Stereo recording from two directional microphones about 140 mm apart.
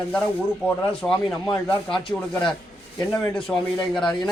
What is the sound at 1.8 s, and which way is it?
Speech, 5° left (ahead or behind).